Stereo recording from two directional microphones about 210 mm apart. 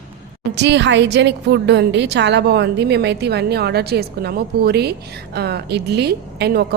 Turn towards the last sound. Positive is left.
turn(degrees=-50)  # may be behind; listen again after turning